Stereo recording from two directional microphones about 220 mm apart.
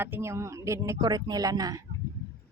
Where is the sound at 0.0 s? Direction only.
10° right (ahead or behind).